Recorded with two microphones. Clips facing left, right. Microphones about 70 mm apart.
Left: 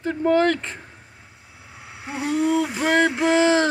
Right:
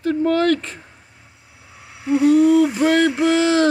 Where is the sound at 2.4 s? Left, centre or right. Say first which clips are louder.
Right 7 dB; centre.